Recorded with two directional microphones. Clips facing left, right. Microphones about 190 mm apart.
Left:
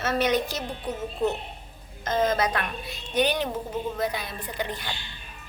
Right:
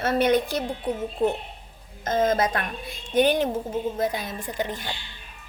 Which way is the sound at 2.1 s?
50° right (ahead or behind).